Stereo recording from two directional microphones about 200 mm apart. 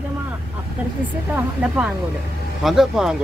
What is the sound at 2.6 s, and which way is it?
Speech, centre (ahead or behind).